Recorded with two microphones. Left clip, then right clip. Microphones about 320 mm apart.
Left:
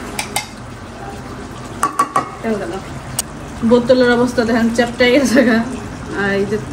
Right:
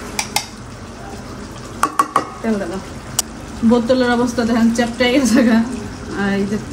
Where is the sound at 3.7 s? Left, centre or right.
Right.